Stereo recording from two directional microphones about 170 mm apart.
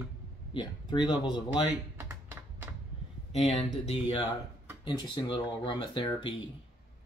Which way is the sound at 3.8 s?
35° left (ahead or behind).